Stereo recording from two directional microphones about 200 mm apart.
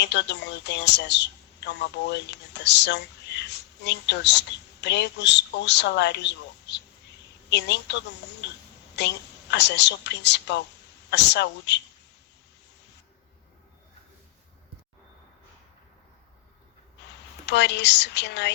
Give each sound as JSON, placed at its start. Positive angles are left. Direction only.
{"t": 0.0, "sound": "a woman's voice", "side_deg": 60}
{"t": 17.4, "sound": "a woman's voice", "side_deg": 60}